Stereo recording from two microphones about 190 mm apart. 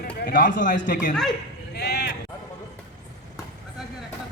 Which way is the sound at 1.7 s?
60° left (ahead or behind).